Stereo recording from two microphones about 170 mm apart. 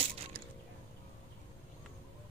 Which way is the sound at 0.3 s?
70° right (ahead or behind).